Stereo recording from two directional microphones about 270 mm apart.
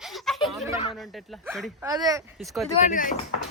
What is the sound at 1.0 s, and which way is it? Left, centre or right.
Speech, centre.